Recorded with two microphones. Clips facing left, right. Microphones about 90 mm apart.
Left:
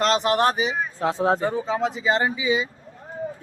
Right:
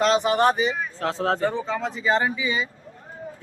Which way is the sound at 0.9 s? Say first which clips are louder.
Left 6 dB; 15° left (ahead or behind).